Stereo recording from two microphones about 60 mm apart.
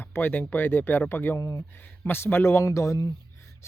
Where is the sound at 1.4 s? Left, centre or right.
Left.